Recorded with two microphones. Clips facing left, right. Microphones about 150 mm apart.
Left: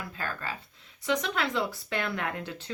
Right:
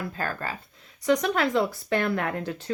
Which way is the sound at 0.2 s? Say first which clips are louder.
Right 4 dB; 45° right (ahead or behind).